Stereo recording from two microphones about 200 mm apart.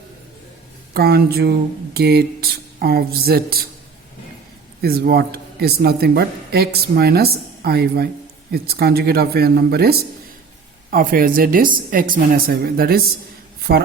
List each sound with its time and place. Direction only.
0.9 s speech: 50° right (ahead or behind)
4.8 s a man's voice: 50° right (ahead or behind)